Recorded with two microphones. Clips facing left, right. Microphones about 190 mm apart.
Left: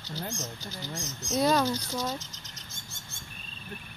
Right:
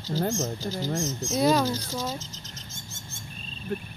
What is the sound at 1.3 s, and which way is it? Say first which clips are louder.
Speech: right 2 dB; 5° right (ahead or behind).